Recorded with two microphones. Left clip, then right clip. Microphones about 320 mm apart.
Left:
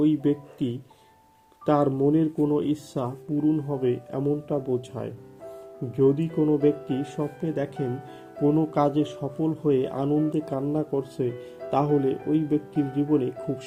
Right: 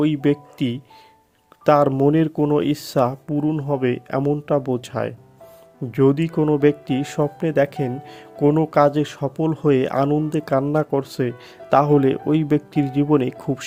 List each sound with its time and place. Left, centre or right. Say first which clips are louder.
0.0 s speech: right 4 dB; right